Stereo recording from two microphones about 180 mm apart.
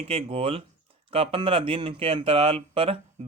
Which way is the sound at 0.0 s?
35° right (ahead or behind).